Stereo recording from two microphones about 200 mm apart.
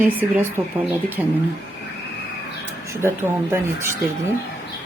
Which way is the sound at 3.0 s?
10° right (ahead or behind).